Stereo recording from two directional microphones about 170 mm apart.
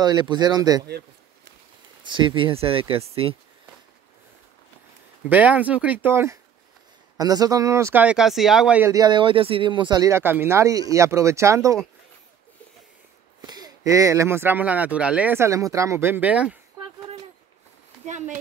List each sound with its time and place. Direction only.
0.0 s speech: 25° right (ahead or behind)
2.0 s speech: 30° right (ahead or behind)
5.3 s speech: 10° right (ahead or behind)
8.9 s speech: 25° right (ahead or behind)
13.5 s speech: 20° right (ahead or behind)
18.0 s speech: 45° right (ahead or behind)